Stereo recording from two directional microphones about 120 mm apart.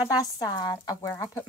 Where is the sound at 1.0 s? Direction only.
25° left (ahead or behind).